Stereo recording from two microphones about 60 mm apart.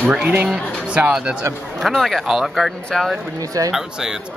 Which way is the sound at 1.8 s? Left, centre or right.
Centre.